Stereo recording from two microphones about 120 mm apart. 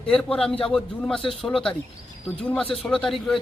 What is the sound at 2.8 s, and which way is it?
Speech, 5° left (ahead or behind).